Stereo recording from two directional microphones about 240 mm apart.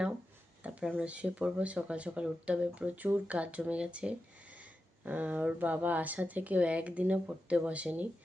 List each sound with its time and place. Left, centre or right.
0.6 s speech: centre